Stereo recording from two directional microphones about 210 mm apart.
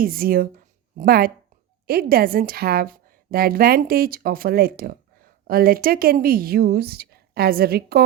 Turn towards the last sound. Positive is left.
turn(degrees=-50)  # may be behind; listen again after turning